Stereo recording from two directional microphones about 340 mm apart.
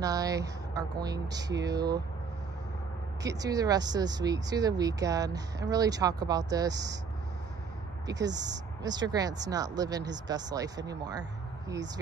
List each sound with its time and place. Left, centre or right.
0.0 s speech: centre
3.2 s speech: centre
8.3 s speech: right
8.8 s speech: centre